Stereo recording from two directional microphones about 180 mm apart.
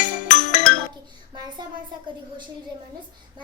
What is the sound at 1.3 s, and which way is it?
Child singing, 25° right (ahead or behind).